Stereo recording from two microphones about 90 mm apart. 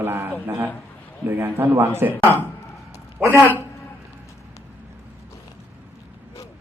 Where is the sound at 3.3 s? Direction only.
15° left (ahead or behind).